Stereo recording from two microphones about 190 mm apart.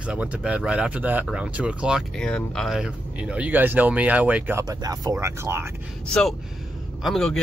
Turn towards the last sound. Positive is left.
turn(degrees=0)  # may be behind; listen again after turning